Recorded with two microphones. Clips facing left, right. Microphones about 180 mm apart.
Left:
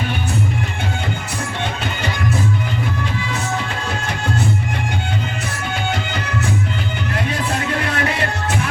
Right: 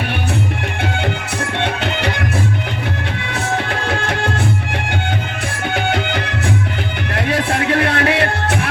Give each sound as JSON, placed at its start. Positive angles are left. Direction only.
{"t": 1.5, "sound": "music", "side_deg": -65}
{"t": 3.8, "sound": "music", "side_deg": -65}
{"t": 5.7, "sound": "music", "side_deg": -60}